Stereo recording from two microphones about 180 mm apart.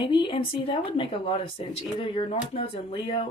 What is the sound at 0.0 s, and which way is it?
Speech, 25° left (ahead or behind).